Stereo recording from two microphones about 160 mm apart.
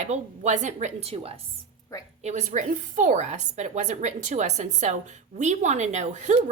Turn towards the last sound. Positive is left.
turn(degrees=-45)  # may be behind; listen again after turning